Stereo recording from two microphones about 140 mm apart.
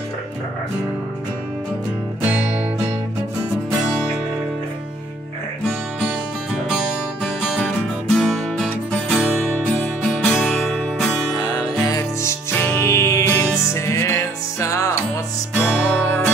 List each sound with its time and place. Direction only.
8.1 s music: 5° left (ahead or behind)
11.3 s music: 30° left (ahead or behind)
15.5 s music: 10° left (ahead or behind)